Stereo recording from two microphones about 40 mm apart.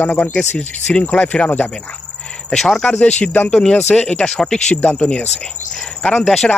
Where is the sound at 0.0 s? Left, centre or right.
Left.